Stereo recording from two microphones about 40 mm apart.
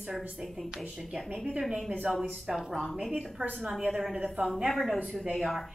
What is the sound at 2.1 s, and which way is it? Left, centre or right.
Speech, right.